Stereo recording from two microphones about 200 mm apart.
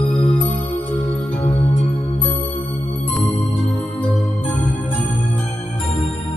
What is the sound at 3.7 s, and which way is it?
Music, 10° left (ahead or behind).